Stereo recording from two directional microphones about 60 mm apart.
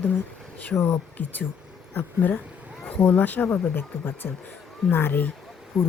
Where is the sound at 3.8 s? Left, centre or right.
Left.